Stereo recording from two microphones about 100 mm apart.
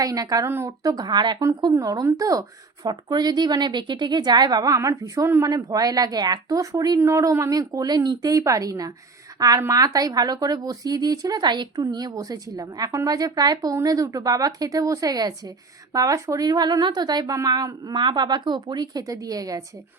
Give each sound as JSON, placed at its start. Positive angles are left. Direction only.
{"t": 0.0, "sound": "speech", "side_deg": -40}
{"t": 0.4, "sound": "a woman's voice", "side_deg": -25}
{"t": 0.8, "sound": "speech", "side_deg": -40}
{"t": 1.7, "sound": "speech", "side_deg": -35}